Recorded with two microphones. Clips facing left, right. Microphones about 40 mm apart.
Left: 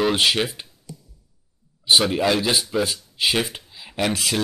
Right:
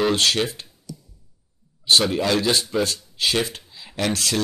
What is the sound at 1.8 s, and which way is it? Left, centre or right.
Speech, centre.